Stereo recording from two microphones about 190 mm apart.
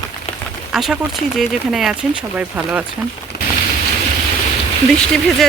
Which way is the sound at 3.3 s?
55° left (ahead or behind).